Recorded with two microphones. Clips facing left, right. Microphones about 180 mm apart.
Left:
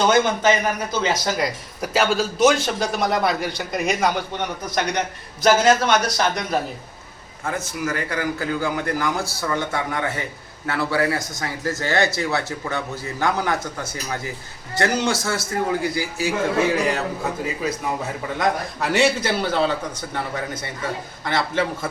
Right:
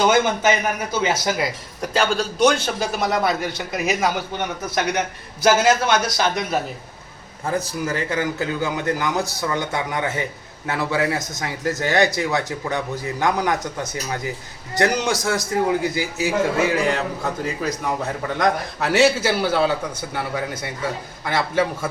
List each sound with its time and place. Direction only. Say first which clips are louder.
0.0 s a man's voice: even; 10° right (ahead or behind)
7.4 s a man's voice: right 2 dB; 35° right (ahead or behind); by 16.3 s 20° right (ahead or behind)
16.7 s a man's voice: right 1 dB; centre (ahead or behind)
18.3 s a man's voice: right 1 dB; centre (ahead or behind)